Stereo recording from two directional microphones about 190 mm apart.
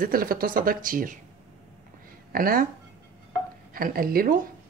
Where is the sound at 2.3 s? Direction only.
50° right (ahead or behind).